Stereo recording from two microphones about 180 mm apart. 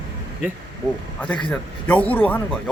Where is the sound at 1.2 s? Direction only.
5° left (ahead or behind).